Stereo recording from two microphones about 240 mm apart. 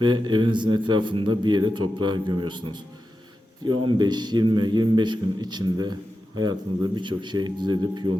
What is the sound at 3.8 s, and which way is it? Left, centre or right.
Speech, centre.